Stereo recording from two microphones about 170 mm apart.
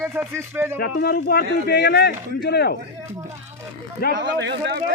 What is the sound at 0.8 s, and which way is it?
Speech, 65° left (ahead or behind).